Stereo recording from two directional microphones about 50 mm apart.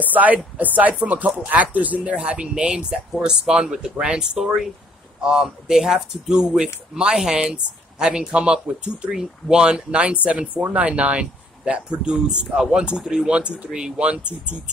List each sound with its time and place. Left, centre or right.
0.0 s speech: right; by 13.3 s centre
13.3 s speech: right
13.7 s speech: centre
13.9 s speech: right